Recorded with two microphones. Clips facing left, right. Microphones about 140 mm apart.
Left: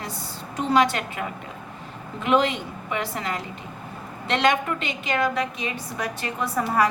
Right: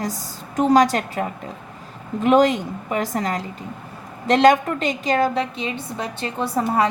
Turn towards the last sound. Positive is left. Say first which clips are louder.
# right 2 dB
turn(degrees=-25)  # may be behind; listen again after turning